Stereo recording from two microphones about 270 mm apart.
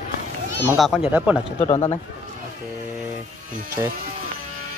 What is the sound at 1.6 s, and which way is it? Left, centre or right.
Speech, left.